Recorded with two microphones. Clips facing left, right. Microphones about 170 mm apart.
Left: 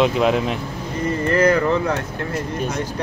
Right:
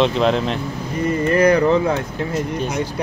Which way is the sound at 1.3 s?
15° right (ahead or behind).